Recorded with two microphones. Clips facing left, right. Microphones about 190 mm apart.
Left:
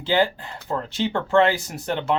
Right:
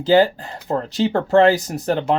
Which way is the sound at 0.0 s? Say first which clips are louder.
Right 7 dB; 40° right (ahead or behind).